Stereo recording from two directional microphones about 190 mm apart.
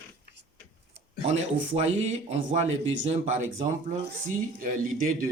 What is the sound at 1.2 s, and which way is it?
Speech, 35° right (ahead or behind).